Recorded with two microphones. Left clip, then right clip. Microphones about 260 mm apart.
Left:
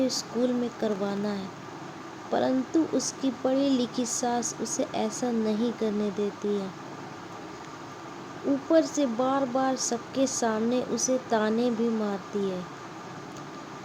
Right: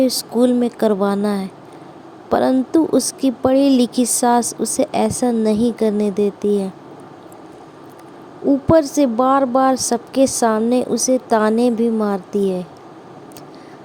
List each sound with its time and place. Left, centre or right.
0.0 s a woman's voice: right
8.7 s a woman's voice: right